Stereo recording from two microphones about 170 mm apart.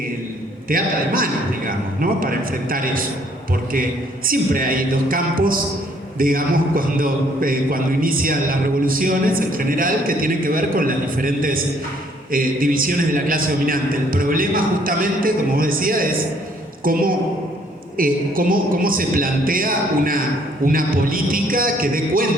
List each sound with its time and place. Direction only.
0.7 s a man's voice: 55° right (ahead or behind)
4.3 s a man's voice: 55° right (ahead or behind)